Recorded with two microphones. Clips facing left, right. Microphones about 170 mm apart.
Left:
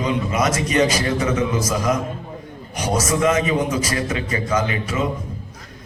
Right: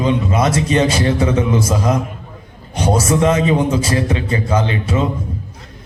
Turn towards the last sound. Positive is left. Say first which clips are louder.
# right 4 dB
turn(degrees=-30)  # may be behind; listen again after turning